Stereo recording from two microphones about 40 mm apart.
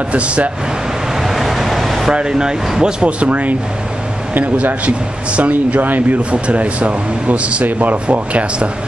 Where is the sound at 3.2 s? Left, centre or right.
Right.